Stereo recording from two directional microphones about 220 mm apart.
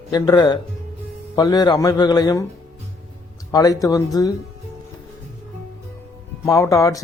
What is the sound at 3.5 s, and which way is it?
Speech, 15° left (ahead or behind).